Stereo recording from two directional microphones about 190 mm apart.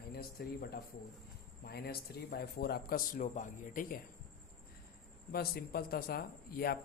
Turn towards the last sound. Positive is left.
turn(degrees=50)  # may be behind; listen again after turning